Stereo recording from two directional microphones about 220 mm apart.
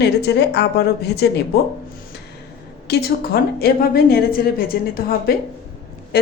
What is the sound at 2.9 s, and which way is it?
A woman's voice, 45° left (ahead or behind).